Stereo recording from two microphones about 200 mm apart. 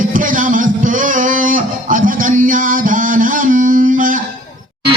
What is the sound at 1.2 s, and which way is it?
Music, 40° right (ahead or behind).